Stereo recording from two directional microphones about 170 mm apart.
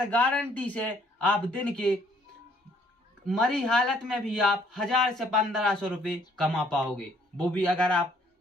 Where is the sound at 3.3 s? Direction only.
5° left (ahead or behind).